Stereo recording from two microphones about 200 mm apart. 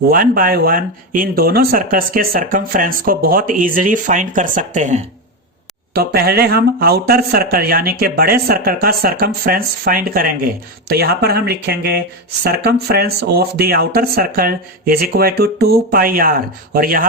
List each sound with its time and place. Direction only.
0.1 s speech: 45° right (ahead or behind)
5.9 s speech: 50° right (ahead or behind)